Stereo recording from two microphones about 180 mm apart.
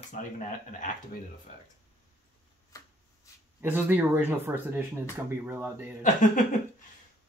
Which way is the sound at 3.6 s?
10° right (ahead or behind).